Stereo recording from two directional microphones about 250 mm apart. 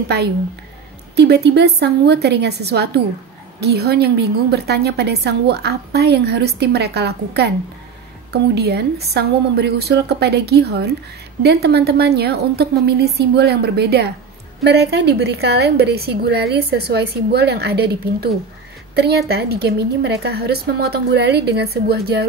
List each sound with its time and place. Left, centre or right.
1.1 s a woman's voice: right